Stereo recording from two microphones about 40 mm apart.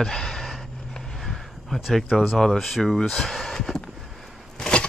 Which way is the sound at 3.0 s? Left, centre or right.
Left.